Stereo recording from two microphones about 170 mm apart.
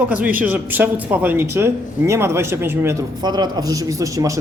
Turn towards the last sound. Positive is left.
turn(degrees=-20)  # may be behind; listen again after turning